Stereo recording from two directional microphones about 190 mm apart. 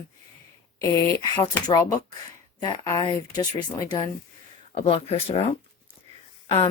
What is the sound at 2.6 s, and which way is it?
Speech, 20° left (ahead or behind).